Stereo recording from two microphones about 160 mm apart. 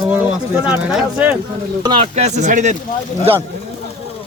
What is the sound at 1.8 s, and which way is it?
Speech, 35° right (ahead or behind).